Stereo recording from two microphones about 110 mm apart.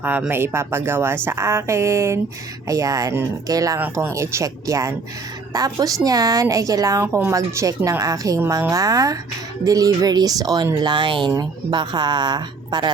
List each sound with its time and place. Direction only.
0.0 s speech: 15° right (ahead or behind); by 12.9 s 40° right (ahead or behind)